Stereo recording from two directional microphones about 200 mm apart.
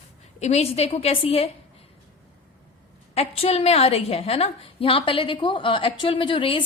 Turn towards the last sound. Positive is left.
turn(degrees=25)  # may be behind; listen again after turning